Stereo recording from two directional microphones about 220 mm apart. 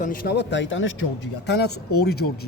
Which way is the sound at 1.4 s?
50° left (ahead or behind).